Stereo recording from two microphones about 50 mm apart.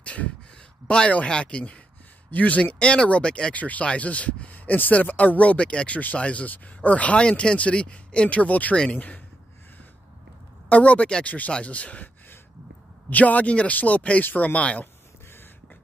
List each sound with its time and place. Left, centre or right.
0.0 s a sound: left
0.8 s speech: left
3.5 s speech: left
10.7 s speech: left
13.1 s speech: left